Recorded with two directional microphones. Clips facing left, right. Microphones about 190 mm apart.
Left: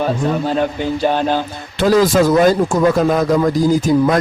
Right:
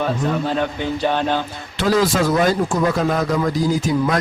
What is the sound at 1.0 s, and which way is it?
Music, 35° left (ahead or behind).